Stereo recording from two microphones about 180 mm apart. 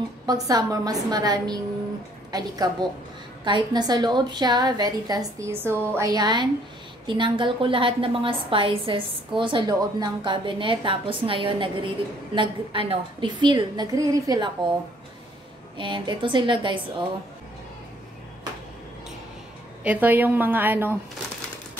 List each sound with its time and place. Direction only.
0.3 s a woman's voice: 20° right (ahead or behind)
15.8 s a woman's voice: 25° right (ahead or behind)
19.8 s a woman's voice: 10° right (ahead or behind)